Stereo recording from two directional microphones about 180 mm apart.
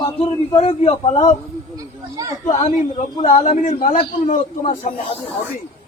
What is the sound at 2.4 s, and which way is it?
A man's voice, 40° left (ahead or behind).